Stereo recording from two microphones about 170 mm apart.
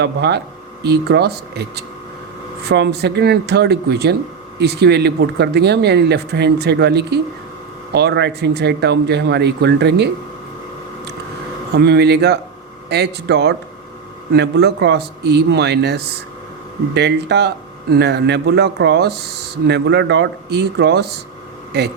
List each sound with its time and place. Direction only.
0.0 s speech: 80° right
11.7 s speech: 75° right (ahead or behind)